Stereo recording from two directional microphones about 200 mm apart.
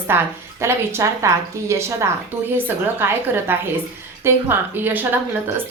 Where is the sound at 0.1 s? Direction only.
10° right (ahead or behind).